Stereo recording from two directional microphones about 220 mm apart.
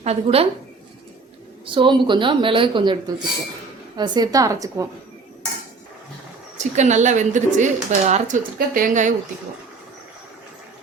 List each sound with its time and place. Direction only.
0.0 s a woman's voice: 30° right (ahead or behind)
1.6 s a woman's voice: 20° right (ahead or behind)
6.6 s speech: 30° right (ahead or behind)